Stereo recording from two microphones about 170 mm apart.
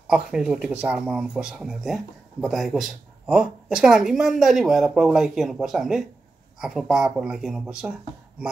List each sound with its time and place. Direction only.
0.1 s speech: 5° right (ahead or behind)